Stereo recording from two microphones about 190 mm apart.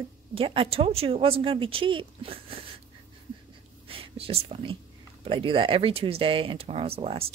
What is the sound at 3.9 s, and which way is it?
Speech, 30° right (ahead or behind).